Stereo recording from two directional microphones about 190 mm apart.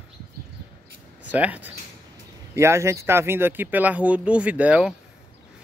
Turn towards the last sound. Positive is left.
turn(degrees=-5)  # may be behind; listen again after turning